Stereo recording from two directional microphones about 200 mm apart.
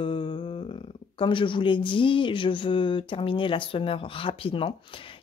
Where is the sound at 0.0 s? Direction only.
25° left (ahead or behind).